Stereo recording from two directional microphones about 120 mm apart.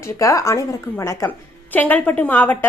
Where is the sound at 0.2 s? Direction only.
25° left (ahead or behind).